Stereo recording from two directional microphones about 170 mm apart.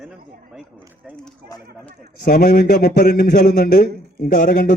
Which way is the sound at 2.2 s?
60° left (ahead or behind).